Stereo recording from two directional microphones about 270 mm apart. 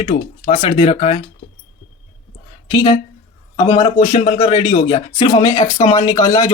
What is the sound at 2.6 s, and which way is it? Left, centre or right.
Speech, centre.